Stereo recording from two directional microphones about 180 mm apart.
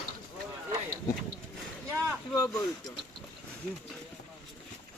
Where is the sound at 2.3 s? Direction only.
15° left (ahead or behind).